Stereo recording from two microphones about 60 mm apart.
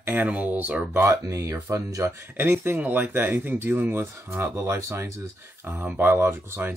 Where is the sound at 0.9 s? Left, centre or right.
Right.